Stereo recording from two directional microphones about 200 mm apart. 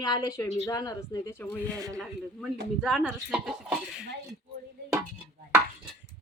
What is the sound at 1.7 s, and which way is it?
Speech, 15° right (ahead or behind).